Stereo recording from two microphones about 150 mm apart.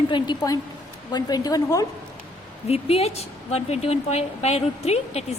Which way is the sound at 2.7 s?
45° left (ahead or behind).